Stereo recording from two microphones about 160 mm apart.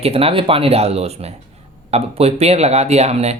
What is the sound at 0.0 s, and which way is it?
Speech, 35° right (ahead or behind).